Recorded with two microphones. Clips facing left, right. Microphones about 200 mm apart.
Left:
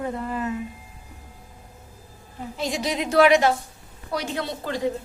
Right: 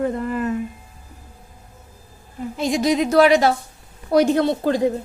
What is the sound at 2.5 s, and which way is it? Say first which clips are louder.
Speech: right 8 dB; 45° right (ahead or behind).